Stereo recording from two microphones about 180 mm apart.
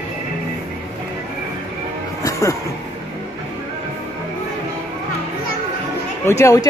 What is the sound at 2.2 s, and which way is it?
Music, 15° left (ahead or behind).